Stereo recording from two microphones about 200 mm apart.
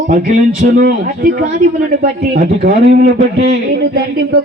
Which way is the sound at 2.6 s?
50° right (ahead or behind).